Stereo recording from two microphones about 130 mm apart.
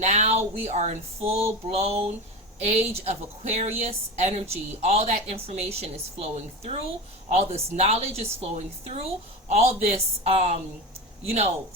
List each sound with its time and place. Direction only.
0.0 s a woman's voice: 60° right (ahead or behind)